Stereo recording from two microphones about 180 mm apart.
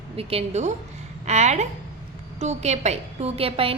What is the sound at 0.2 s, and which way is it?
A woman's voice, 35° right (ahead or behind).